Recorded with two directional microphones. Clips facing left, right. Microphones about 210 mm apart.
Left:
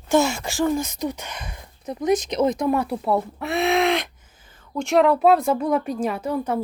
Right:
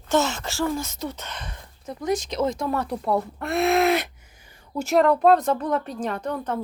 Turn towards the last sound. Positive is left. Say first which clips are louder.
# left 3 dB
turn(degrees=10)  # may be behind; listen again after turning